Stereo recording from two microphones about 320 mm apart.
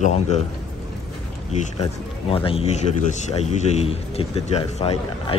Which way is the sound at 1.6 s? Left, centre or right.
Centre.